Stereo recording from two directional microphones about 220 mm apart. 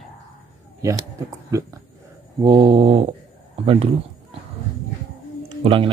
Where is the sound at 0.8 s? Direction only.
15° right (ahead or behind).